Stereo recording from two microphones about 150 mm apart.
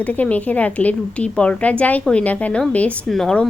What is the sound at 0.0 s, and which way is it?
A woman's voice, 10° left (ahead or behind).